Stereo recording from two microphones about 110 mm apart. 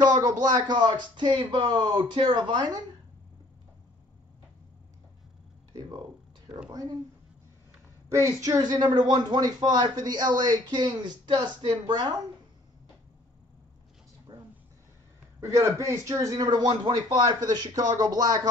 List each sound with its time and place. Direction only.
0.0 s speech: 40° right (ahead or behind)
5.7 s a sound: 40° right (ahead or behind)
6.7 s speech: 35° right (ahead or behind)
8.1 s speech: 30° right (ahead or behind)
14.3 s a sound: 45° right (ahead or behind)
15.9 s speech: 30° right (ahead or behind)